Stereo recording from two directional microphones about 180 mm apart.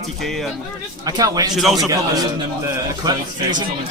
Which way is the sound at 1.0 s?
20° right (ahead or behind).